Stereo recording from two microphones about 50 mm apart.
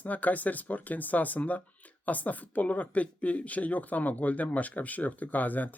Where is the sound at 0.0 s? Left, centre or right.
Left.